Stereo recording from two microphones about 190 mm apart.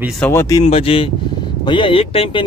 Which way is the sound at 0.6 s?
30° left (ahead or behind).